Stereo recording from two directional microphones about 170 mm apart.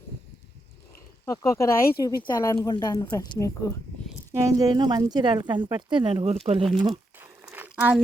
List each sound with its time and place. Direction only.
1.2 s speech: 20° left (ahead or behind)
4.3 s speech: 15° right (ahead or behind); by 6.7 s 35° right (ahead or behind)
6.7 s crumpling: 25° right (ahead or behind)